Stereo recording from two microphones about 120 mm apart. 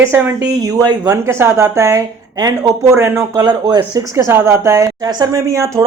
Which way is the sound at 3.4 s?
35° right (ahead or behind).